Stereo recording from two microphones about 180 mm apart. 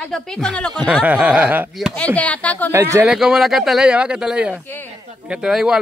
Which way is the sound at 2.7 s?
15° right (ahead or behind).